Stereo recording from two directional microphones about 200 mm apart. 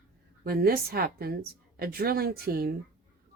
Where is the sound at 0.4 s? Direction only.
50° right (ahead or behind).